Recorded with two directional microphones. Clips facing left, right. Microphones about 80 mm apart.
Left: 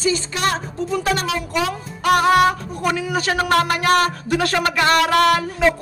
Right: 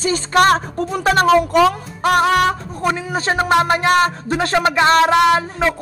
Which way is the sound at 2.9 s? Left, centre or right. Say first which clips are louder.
Right 1 dB; right.